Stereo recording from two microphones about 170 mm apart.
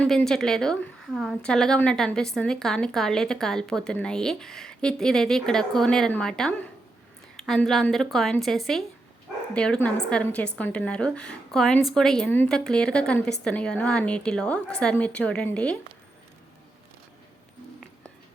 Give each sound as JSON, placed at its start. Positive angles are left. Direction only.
{"t": 0.0, "sound": "a woman's voice", "side_deg": 5}